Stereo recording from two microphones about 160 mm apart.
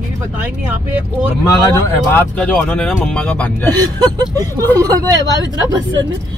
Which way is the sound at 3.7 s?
25° right (ahead or behind).